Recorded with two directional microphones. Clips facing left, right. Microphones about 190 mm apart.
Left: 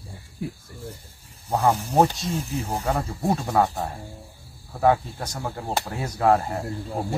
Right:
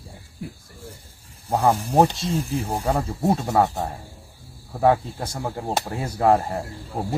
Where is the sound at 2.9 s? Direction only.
25° right (ahead or behind).